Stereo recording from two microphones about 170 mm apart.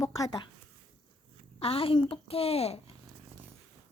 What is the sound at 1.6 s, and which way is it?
A woman's voice, 35° left (ahead or behind).